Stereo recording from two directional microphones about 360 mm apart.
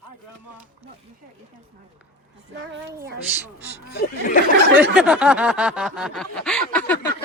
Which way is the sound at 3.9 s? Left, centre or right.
Left.